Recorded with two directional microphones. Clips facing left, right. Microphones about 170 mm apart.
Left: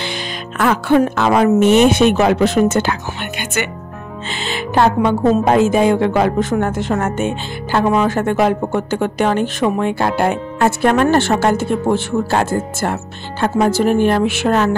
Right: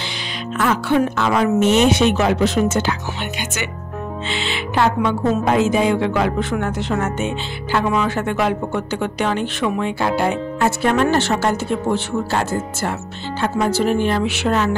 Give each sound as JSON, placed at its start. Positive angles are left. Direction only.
{"t": 0.6, "sound": "a woman's voice", "side_deg": 55}
{"t": 4.3, "sound": "a woman's voice", "side_deg": 45}